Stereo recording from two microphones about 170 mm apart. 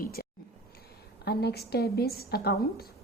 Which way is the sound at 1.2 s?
75° left (ahead or behind).